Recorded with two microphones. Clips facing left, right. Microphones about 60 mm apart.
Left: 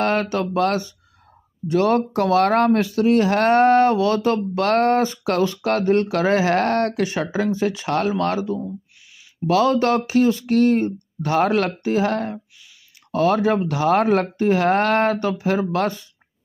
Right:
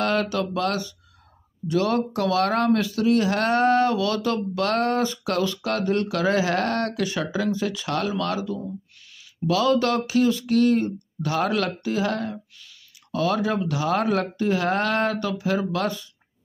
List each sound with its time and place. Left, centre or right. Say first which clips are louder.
0.0 s speech: left 3 dB; left